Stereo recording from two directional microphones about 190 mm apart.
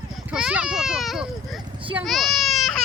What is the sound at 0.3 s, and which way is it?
Speech, 5° right (ahead or behind).